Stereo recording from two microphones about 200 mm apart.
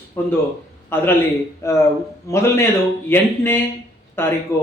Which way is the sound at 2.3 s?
15° left (ahead or behind).